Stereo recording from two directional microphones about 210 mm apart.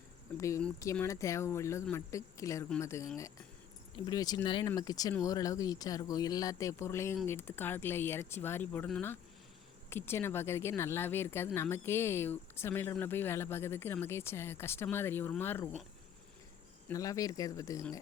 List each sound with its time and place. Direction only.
0.3 s speech: 15° left (ahead or behind)
16.9 s speech: 15° left (ahead or behind)